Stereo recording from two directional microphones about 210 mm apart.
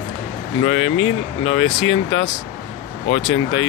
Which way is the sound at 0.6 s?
30° left (ahead or behind).